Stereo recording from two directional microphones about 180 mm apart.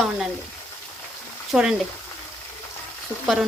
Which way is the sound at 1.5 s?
5° right (ahead or behind).